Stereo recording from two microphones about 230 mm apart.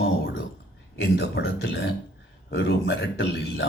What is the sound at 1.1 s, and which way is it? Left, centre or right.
Speech, left.